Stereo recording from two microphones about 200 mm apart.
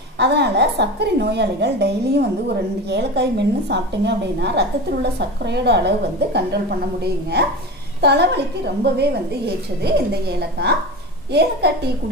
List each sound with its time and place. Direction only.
0.2 s a woman's voice: 55° right (ahead or behind)